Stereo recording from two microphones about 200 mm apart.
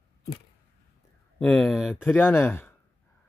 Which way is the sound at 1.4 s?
5° left (ahead or behind).